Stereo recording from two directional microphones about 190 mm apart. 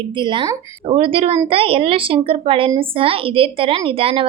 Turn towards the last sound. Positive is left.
turn(degrees=-30)  # may be behind; listen again after turning